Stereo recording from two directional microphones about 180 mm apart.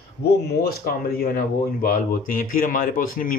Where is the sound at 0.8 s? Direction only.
55° left (ahead or behind).